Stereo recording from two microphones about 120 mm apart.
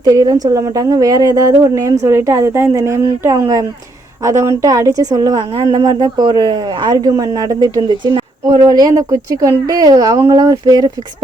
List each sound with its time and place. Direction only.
0.0 s a woman's voice: 30° right (ahead or behind)